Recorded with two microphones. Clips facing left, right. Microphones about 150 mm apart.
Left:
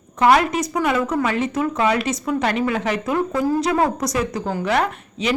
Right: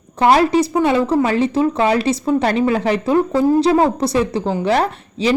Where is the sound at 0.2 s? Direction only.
30° right (ahead or behind).